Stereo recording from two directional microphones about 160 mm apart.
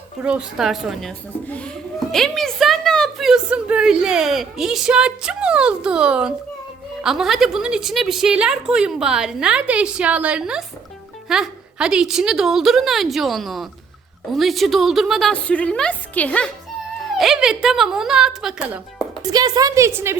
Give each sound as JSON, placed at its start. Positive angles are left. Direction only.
{"t": 0.2, "sound": "a woman's voice", "side_deg": -5}
{"t": 19.3, "sound": "a woman's voice", "side_deg": -25}